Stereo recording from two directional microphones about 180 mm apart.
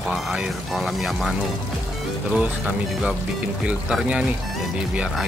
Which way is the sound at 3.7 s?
5° right (ahead or behind).